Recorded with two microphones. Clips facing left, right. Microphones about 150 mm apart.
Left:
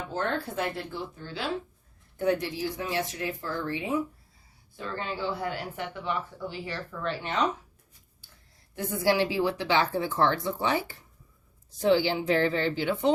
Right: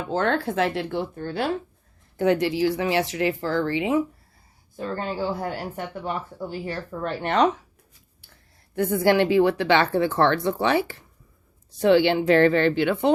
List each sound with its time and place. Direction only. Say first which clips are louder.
0.1 s speech: right 8 dB; 90° right; by 1.5 s 55° right (ahead or behind)
2.1 s speech: right 6 dB; 90° right
4.8 s speech: right 5 dB; 45° right (ahead or behind); by 7.5 s 70° right (ahead or behind)
8.2 s a sound: right 4 dB; 65° right (ahead or behind)
8.7 s a woman's voice: right 6 dB; 60° right (ahead or behind)